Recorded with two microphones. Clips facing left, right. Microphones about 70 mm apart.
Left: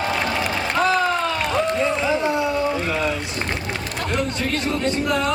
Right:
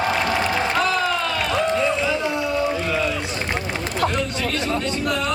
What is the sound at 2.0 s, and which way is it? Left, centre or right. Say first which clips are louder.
Music: left 2 dB; left.